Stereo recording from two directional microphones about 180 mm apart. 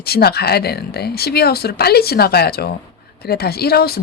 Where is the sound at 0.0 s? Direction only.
60° left (ahead or behind).